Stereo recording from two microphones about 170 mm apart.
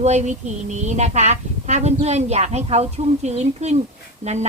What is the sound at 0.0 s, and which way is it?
Speech, 45° right (ahead or behind).